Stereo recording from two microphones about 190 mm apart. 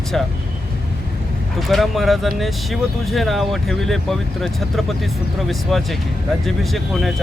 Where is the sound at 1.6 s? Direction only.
Centre (ahead or behind).